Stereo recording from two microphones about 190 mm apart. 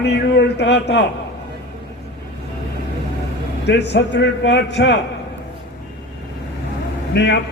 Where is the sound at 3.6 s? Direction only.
65° left (ahead or behind).